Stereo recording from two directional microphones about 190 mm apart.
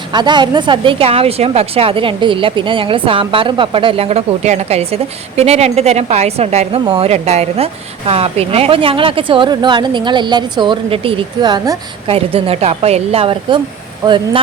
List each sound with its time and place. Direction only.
0.1 s a woman's voice: 25° right (ahead or behind)
12.1 s a woman's voice: 30° right (ahead or behind)